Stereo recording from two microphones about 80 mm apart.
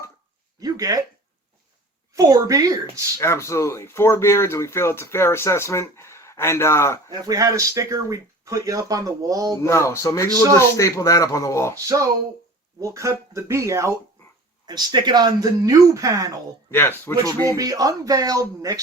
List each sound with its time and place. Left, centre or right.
0.6 s a sound: right
2.1 s speech: right
3.2 s speech: left
7.1 s speech: right
9.6 s speech: left
11.9 s speech: right
14.7 s speech: right
16.7 s speech: left
17.6 s speech: right